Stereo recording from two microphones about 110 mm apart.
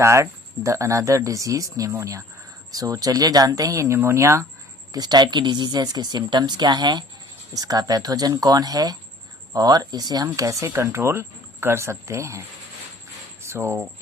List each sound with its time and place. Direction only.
0.0 s speech: 25° right (ahead or behind)
4.9 s speech: 40° right (ahead or behind)
13.4 s a sound: 25° right (ahead or behind)